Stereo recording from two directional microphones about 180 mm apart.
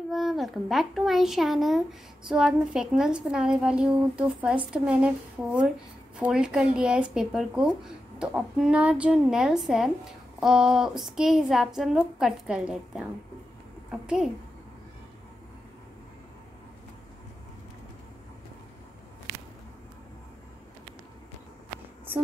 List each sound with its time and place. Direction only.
0.1 s a woman's voice: centre (ahead or behind)